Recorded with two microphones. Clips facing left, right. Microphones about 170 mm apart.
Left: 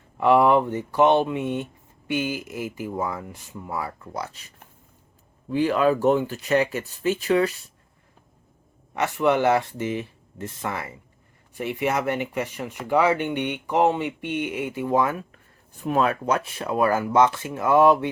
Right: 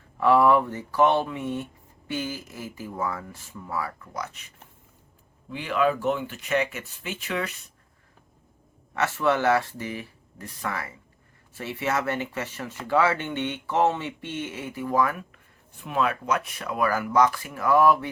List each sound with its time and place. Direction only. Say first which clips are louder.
0.2 s speech: left 2 dB; 20° left (ahead or behind)
5.5 s speech: left 4 dB; 40° left (ahead or behind)
9.0 s speech: left 3 dB; 20° left (ahead or behind)
15.8 s speech: left 4 dB; 40° left (ahead or behind); by 18.1 s 20° left (ahead or behind)